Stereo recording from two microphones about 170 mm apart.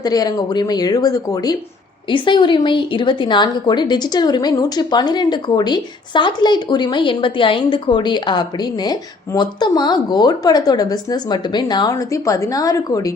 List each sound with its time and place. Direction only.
0.0 s a woman's voice: 20° left (ahead or behind)